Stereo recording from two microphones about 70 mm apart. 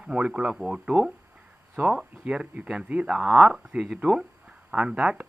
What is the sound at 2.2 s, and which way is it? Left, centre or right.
Speech, centre.